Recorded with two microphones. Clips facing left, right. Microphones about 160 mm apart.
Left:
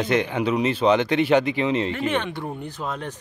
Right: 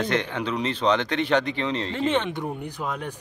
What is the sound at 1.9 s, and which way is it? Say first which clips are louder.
Speech: right 1 dB; 25° right (ahead or behind).